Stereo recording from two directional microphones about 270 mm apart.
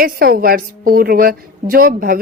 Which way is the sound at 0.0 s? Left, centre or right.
Right.